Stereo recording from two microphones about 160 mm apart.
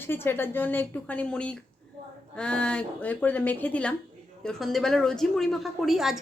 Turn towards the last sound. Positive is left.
turn(degrees=0)  # may be behind; listen again after turning